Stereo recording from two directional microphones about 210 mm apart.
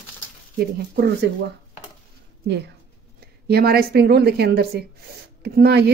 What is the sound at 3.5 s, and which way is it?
A woman's voice, 45° right (ahead or behind).